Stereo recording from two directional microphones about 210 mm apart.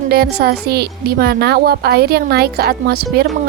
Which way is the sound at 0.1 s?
50° right (ahead or behind).